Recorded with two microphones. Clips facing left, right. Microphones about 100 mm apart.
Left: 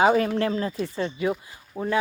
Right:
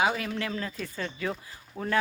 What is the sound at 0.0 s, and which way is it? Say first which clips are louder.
Speech: left 8 dB; 40° left (ahead or behind).